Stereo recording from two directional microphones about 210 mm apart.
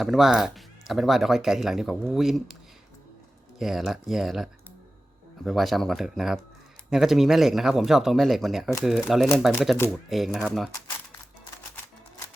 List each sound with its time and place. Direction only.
0.0 s speech: centre (ahead or behind)
3.6 s speech: centre (ahead or behind)
9.7 s speech: 10° left (ahead or behind)
10.1 s speech: centre (ahead or behind)